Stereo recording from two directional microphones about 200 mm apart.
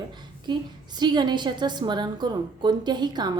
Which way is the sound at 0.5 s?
25° right (ahead or behind).